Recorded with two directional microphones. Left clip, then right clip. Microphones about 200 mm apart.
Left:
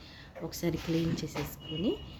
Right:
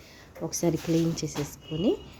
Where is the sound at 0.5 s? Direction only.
10° right (ahead or behind).